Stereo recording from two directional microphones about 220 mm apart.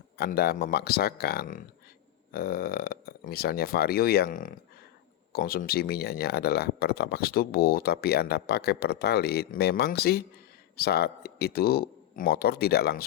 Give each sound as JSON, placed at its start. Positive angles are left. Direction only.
{"t": 0.2, "sound": "speech", "side_deg": 45}